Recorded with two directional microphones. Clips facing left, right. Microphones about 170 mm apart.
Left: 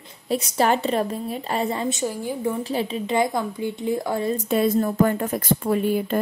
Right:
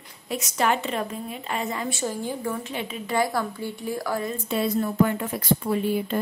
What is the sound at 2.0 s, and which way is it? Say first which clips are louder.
Speech: left 3 dB; 15° left (ahead or behind).